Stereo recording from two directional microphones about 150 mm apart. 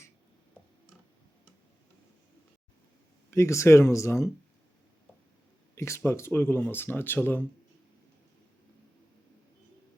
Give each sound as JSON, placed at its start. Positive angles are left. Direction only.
{"t": 3.2, "sound": "speech", "side_deg": 20}
{"t": 5.7, "sound": "speech", "side_deg": 20}